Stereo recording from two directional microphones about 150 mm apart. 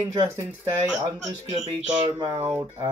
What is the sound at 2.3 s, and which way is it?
Speech, 10° right (ahead or behind).